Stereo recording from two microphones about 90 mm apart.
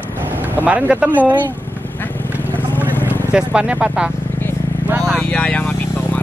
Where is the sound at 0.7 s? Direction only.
15° right (ahead or behind).